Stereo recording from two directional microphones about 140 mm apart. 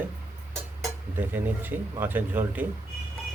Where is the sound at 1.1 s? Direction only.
15° right (ahead or behind).